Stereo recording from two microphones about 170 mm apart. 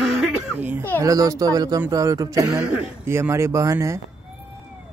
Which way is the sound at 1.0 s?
20° right (ahead or behind).